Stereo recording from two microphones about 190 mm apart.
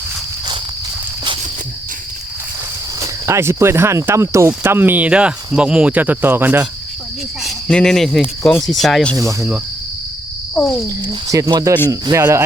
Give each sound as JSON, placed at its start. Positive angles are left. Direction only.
{"t": 3.0, "sound": "speech", "side_deg": -15}
{"t": 7.4, "sound": "speech", "side_deg": 5}
{"t": 10.5, "sound": "speech", "side_deg": 15}
{"t": 11.1, "sound": "speech", "side_deg": -20}